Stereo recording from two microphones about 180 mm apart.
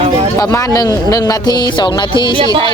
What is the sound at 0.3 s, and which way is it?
Speech, 20° left (ahead or behind).